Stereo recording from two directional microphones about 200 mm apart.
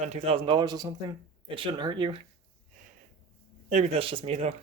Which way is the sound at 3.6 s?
35° right (ahead or behind).